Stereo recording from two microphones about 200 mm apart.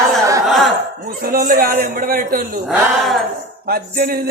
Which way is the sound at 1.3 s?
45° right (ahead or behind).